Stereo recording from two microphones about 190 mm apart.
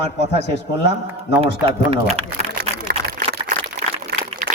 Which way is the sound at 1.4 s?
30° right (ahead or behind).